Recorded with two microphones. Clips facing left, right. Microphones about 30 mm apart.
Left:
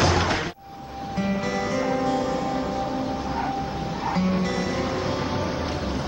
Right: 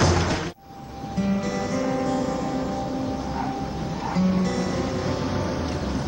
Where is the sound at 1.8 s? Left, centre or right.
Centre.